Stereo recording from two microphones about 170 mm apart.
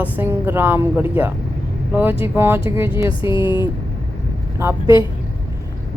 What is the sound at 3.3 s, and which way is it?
Speech, 25° left (ahead or behind).